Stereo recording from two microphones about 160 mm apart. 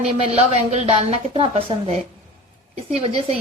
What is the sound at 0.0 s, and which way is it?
A woman's voice, 40° right (ahead or behind).